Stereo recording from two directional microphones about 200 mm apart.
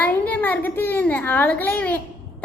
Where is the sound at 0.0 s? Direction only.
10° left (ahead or behind).